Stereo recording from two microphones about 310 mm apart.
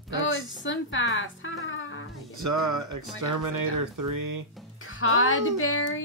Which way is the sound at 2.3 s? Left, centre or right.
Right.